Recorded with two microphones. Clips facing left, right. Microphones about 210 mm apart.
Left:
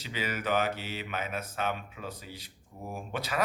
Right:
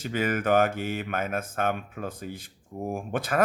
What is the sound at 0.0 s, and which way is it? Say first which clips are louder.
A man's voice: right 7 dB; 50° right (ahead or behind).